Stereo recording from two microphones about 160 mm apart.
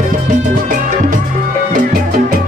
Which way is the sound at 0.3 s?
55° right (ahead or behind).